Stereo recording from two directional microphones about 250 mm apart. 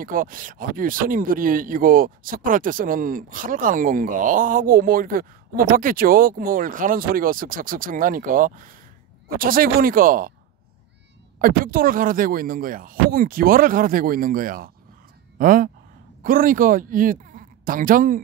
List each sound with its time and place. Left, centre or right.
0.0 s speech: right
11.3 s speech: right